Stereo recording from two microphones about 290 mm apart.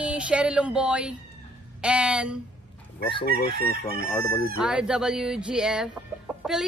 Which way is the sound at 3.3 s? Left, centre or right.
Right.